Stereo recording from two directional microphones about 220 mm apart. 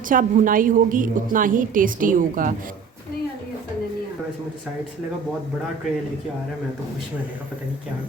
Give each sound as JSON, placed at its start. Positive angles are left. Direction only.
{"t": 0.1, "sound": "a woman's voice", "side_deg": -40}